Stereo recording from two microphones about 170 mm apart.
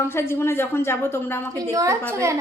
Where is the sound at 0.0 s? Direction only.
15° left (ahead or behind).